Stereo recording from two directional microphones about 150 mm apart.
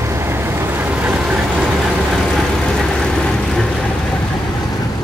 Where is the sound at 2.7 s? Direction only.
5° left (ahead or behind).